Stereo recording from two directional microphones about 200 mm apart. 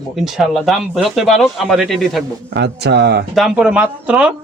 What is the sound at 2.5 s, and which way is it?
Speech, 60° right (ahead or behind).